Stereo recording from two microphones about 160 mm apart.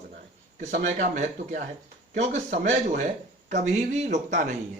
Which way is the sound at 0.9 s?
45° right (ahead or behind).